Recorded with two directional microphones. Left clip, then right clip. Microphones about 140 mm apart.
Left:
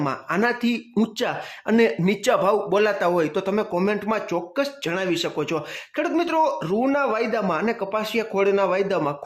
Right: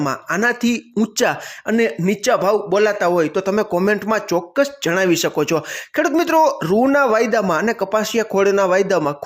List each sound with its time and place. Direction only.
0.0 s speech: 20° right (ahead or behind)
1.1 s speech: 35° right (ahead or behind)
1.6 s speech: 10° right (ahead or behind); by 9.1 s 30° right (ahead or behind)